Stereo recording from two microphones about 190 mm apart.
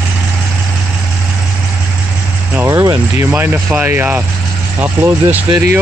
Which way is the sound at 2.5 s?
15° right (ahead or behind).